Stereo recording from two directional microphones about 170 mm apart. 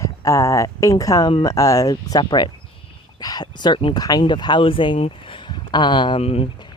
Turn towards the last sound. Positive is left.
turn(degrees=35)  # may be behind; listen again after turning